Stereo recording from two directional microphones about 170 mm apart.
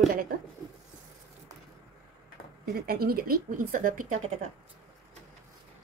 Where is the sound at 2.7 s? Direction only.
65° right (ahead or behind).